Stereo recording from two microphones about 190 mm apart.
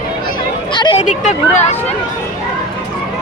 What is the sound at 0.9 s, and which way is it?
Speech, 40° left (ahead or behind).